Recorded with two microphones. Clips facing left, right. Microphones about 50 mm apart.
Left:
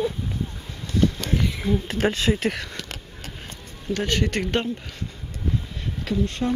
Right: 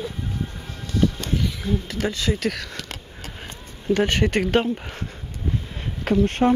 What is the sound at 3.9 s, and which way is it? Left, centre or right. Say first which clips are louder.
Speech: right 4 dB; right.